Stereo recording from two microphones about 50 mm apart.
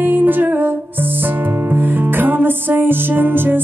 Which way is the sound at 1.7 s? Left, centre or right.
Right.